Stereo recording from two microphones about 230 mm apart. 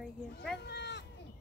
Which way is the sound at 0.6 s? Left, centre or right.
Left.